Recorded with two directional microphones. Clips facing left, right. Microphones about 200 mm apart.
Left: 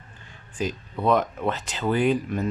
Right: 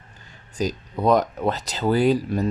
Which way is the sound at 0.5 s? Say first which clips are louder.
Right 3 dB; 40° right (ahead or behind).